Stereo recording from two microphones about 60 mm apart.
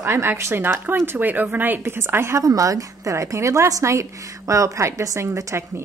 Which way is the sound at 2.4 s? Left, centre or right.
Right.